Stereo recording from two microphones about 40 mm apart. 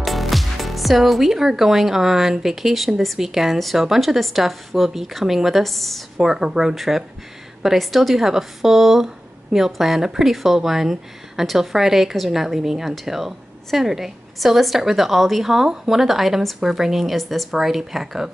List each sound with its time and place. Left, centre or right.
0.0 s a woman's voice: centre
6.1 s a woman's voice: centre